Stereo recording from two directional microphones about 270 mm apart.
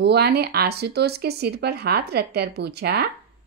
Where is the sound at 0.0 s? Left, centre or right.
Right.